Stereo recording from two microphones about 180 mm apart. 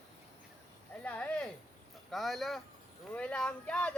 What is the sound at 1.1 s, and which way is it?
Speech, 10° left (ahead or behind).